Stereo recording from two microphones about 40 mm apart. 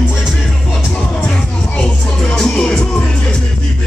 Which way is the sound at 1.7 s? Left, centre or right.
Left.